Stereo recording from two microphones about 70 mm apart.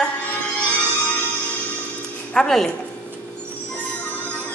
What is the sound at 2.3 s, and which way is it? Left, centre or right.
Speech, centre.